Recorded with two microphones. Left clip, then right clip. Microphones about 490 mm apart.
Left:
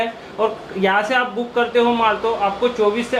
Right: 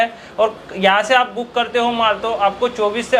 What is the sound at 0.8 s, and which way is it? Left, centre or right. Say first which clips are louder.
A man's voice: right 4 dB; right.